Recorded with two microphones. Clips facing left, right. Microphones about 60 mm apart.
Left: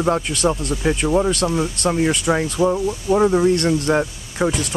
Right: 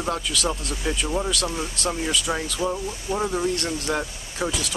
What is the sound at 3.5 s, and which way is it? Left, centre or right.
Speech, left.